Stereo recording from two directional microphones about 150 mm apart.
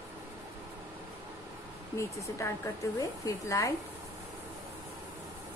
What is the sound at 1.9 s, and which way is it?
Speech, 20° left (ahead or behind).